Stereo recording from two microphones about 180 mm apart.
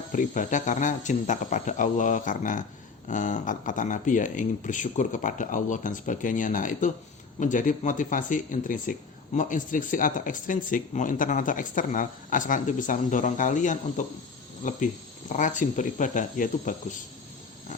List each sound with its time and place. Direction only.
0.1 s speech: 45° left (ahead or behind)